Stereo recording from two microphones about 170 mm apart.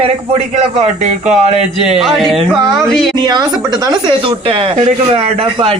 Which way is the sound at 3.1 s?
25° right (ahead or behind).